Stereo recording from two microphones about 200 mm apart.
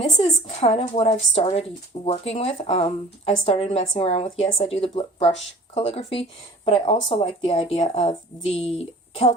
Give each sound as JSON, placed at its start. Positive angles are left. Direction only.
{"t": 0.4, "sound": "speech", "side_deg": 30}